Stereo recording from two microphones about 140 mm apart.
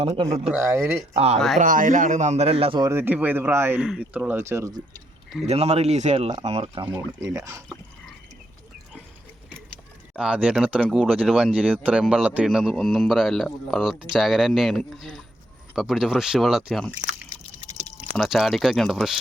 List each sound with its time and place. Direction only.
0.0 s speech: 35° right (ahead or behind)
0.3 s speech: 50° right (ahead or behind)
0.7 s speech: 20° right (ahead or behind)
1.1 s speech: 50° right (ahead or behind)
1.5 s speech: 70° right (ahead or behind); by 2.8 s 40° right (ahead or behind)
2.8 s speech: 15° right (ahead or behind)
3.8 s speech: 5° right (ahead or behind)
5.5 s speech: 45° right (ahead or behind)
6.9 s speech: 20° right (ahead or behind)
10.2 s a man's voice: 5° right (ahead or behind)
18.1 s a man's voice: centre (ahead or behind)